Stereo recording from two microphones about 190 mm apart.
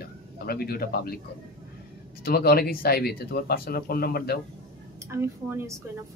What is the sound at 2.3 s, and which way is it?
Speech, 55° left (ahead or behind).